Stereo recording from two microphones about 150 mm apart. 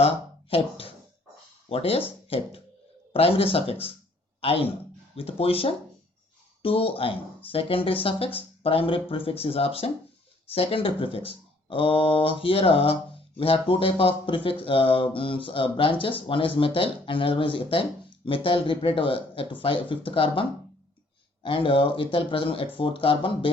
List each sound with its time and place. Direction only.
0.5 s speech: 40° left (ahead or behind)
1.7 s speech: 40° left (ahead or behind)